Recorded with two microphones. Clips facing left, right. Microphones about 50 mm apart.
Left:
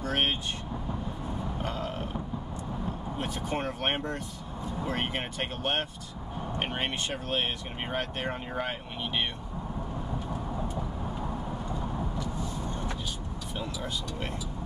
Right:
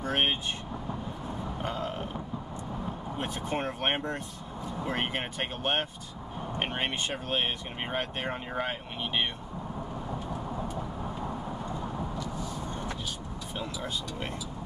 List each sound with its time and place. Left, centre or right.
0.0 s vehicle: centre
1.6 s a sound: centre
3.4 s speech: centre